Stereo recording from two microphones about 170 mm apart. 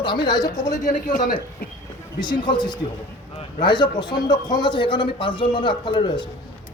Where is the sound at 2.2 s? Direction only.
25° left (ahead or behind).